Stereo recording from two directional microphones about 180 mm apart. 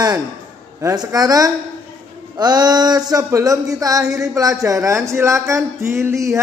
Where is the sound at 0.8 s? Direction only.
20° right (ahead or behind).